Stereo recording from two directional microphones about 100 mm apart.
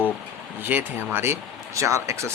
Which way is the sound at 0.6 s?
20° right (ahead or behind).